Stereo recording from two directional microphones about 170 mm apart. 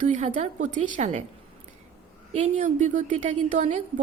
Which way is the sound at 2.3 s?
45° right (ahead or behind).